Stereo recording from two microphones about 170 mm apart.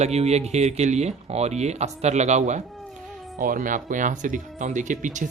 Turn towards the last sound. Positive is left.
turn(degrees=-45)  # may be behind; listen again after turning